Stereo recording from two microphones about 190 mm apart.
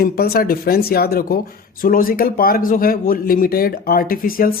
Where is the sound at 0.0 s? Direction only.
55° left (ahead or behind).